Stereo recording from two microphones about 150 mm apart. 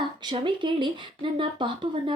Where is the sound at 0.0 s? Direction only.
30° right (ahead or behind).